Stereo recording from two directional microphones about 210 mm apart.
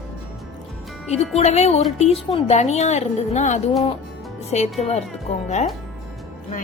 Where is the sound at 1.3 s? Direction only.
30° left (ahead or behind).